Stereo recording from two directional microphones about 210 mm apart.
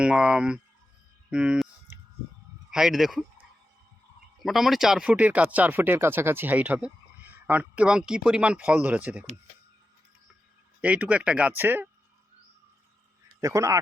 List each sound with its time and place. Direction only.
0.0 s speech: 5° right (ahead or behind)
1.3 s clicking: 5° right (ahead or behind)
2.6 s speech: centre (ahead or behind)
4.4 s speech: centre (ahead or behind)
10.8 s speech: 5° right (ahead or behind)
13.4 s speech: 15° right (ahead or behind)